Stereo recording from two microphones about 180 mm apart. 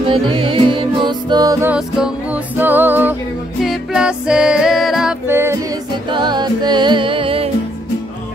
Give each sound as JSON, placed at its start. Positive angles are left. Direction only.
{"t": 0.1, "sound": "music", "side_deg": -30}
{"t": 5.3, "sound": "music", "side_deg": -15}
{"t": 6.1, "sound": "music", "side_deg": -25}